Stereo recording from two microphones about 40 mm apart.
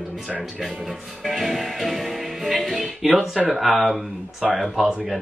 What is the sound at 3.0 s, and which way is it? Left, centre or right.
Speech, centre.